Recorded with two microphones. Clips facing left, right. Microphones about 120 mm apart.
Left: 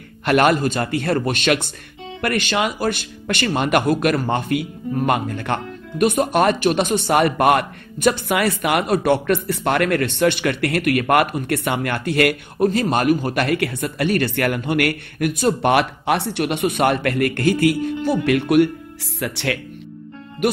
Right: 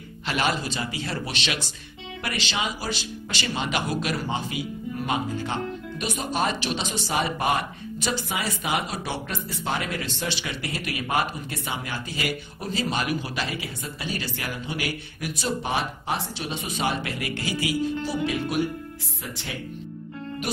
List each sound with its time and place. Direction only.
0.2 s speech: 55° left (ahead or behind); by 19.6 s 75° left (ahead or behind)